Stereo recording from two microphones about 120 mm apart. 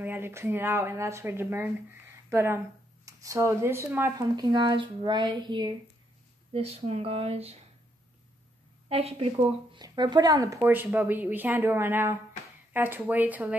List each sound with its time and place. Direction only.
0.0 s speech: 15° right (ahead or behind)
4.4 s speech: 35° right (ahead or behind)
6.5 s speech: 60° right (ahead or behind)
8.8 s speech: 60° right (ahead or behind)
9.8 s speech: 35° right (ahead or behind)
10.6 s speech: 15° right (ahead or behind)